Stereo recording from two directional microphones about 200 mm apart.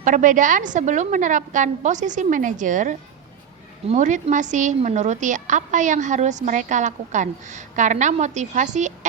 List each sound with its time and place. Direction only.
0.0 s a woman's voice: 40° right (ahead or behind)